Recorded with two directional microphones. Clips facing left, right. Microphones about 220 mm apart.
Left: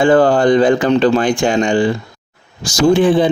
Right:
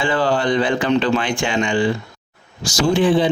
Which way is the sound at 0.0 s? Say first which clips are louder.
Left 8 dB; 45° left (ahead or behind).